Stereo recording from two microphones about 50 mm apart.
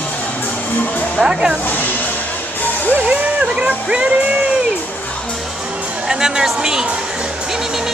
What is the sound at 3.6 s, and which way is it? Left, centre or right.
Music, right.